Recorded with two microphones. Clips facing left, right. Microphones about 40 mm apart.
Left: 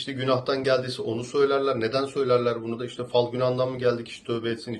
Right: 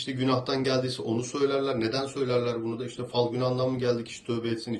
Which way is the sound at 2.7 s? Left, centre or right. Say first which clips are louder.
Left 5 dB; left.